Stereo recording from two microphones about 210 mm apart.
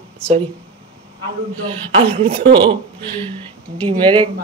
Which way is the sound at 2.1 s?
30° right (ahead or behind).